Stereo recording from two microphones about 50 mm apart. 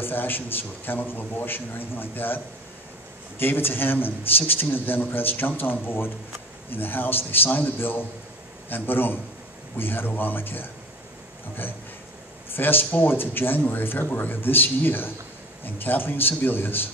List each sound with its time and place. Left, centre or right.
0.0 s a man's voice: left
12.5 s a man's voice: left